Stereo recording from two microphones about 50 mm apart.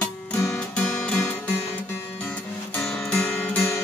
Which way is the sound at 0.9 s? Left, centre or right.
Centre.